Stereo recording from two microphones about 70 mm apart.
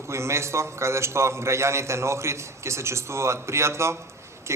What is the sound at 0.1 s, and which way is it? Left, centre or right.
A man's voice, right.